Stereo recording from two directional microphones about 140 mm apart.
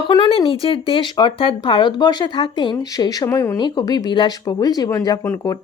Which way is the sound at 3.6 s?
30° left (ahead or behind).